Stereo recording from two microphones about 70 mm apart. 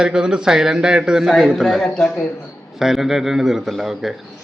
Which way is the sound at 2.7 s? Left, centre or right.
Centre.